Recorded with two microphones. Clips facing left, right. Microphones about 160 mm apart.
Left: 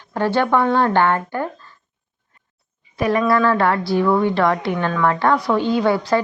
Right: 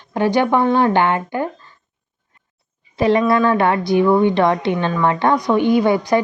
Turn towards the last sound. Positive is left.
turn(degrees=-15)  # may be behind; listen again after turning